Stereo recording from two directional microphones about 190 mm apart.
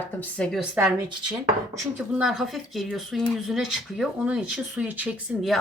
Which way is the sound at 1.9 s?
5° right (ahead or behind).